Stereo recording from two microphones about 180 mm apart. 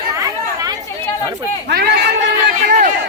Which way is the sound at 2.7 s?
45° right (ahead or behind).